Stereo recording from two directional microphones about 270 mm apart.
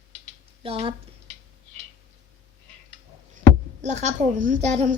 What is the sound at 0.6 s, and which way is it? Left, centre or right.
Speech, right.